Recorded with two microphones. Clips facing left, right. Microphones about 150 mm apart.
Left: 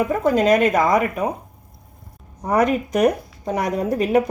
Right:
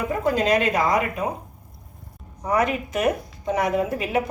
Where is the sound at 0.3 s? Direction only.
45° left (ahead or behind).